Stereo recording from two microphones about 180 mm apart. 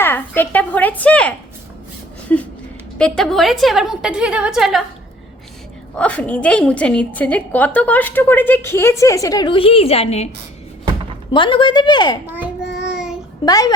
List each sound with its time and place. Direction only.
0.0 s a woman's voice: 10° left (ahead or behind)
5.9 s a woman's voice: 5° left (ahead or behind); by 10.2 s 35° left (ahead or behind)
11.3 s a woman's voice: 25° left (ahead or behind)
12.6 s child singing: 70° left (ahead or behind)
12.9 s child singing: 5° right (ahead or behind)
13.4 s a woman's voice: 20° left (ahead or behind)